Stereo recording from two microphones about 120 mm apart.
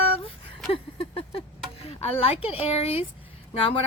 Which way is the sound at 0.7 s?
50° left (ahead or behind).